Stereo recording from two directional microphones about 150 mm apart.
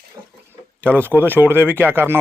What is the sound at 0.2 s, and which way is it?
Speech, 30° right (ahead or behind).